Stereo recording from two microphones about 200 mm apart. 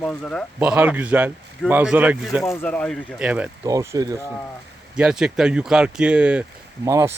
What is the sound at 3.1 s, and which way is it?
Speech, 5° right (ahead or behind).